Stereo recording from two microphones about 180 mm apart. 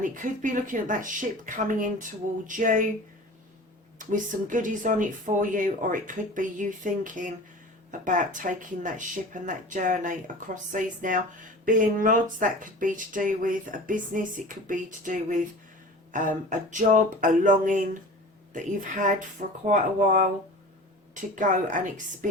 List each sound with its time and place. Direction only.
0.0 s speech: 45° right (ahead or behind)
3.9 s speech: 45° right (ahead or behind)